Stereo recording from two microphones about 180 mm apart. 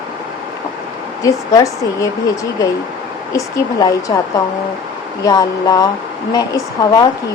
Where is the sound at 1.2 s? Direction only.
20° left (ahead or behind).